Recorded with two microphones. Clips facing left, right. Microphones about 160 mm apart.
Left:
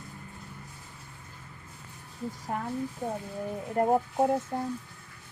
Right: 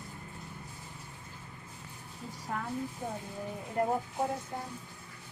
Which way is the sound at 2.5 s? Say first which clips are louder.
Left 3 dB; 35° left (ahead or behind).